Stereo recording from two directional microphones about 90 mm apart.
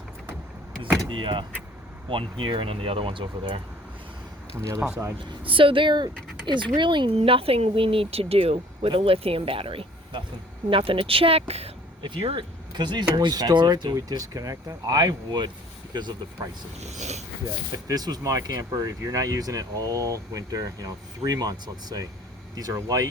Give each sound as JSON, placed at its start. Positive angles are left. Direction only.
{"t": 1.0, "sound": "speech", "side_deg": -65}
{"t": 5.4, "sound": "speech", "side_deg": -75}
{"t": 12.7, "sound": "speech", "side_deg": -55}
{"t": 17.8, "sound": "speech", "side_deg": -45}